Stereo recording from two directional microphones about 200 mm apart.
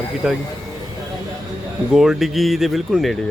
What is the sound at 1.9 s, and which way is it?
Speech, centre (ahead or behind).